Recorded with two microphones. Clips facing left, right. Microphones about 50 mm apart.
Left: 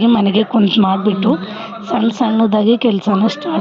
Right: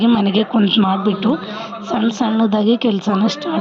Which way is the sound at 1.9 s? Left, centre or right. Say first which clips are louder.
Left 2 dB; left.